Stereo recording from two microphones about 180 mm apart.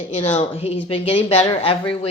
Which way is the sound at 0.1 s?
40° left (ahead or behind).